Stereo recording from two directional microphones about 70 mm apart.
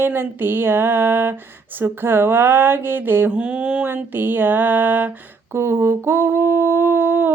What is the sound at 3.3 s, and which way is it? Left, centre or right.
Mantra, centre.